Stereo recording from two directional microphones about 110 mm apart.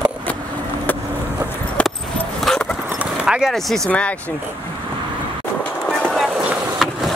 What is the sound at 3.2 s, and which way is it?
Speech, 5° right (ahead or behind).